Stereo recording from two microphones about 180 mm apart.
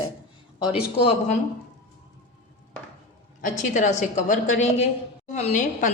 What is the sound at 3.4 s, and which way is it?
A woman's voice, 40° left (ahead or behind).